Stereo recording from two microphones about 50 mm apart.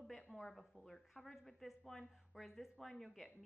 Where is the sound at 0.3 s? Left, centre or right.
Centre.